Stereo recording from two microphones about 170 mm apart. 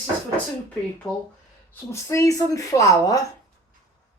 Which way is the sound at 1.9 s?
15° left (ahead or behind).